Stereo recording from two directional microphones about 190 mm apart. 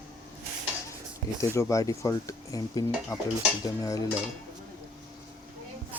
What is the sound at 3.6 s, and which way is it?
Dishes, 20° left (ahead or behind).